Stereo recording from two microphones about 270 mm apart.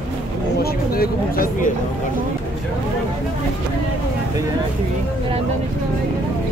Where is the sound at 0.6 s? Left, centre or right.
Left.